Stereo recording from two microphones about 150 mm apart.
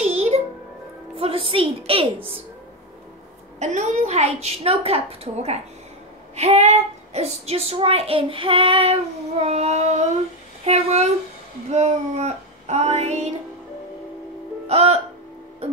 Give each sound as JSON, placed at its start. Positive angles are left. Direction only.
{"t": 0.0, "sound": "music", "side_deg": -45}
{"t": 1.1, "sound": "a woman's voice", "side_deg": -40}
{"t": 3.5, "sound": "a woman's voice", "side_deg": -50}
{"t": 14.7, "sound": "a woman's voice", "side_deg": -45}